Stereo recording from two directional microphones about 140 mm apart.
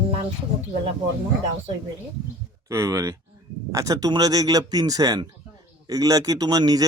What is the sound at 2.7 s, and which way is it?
Speech, 20° right (ahead or behind).